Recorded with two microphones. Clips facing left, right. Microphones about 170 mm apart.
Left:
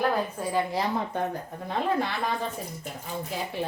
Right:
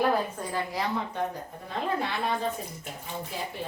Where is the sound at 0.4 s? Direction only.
5° left (ahead or behind).